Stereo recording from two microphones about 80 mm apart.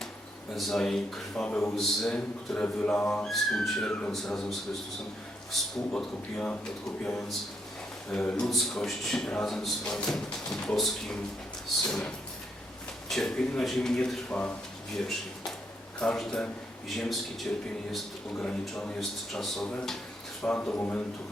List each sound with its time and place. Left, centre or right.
0.5 s a man's voice: centre
3.2 s a man's voice: centre
16.0 s a man's voice: centre
20.4 s speech: centre